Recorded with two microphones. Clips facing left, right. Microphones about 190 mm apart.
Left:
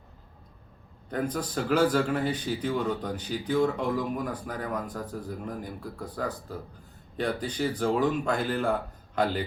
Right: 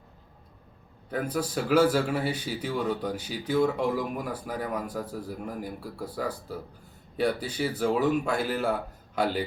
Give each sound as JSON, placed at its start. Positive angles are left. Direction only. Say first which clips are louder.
{"t": 1.1, "sound": "a man's voice", "louder": "right 1 dB", "side_deg": -10}